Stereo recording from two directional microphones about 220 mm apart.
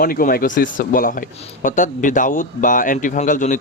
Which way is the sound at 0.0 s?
40° left (ahead or behind).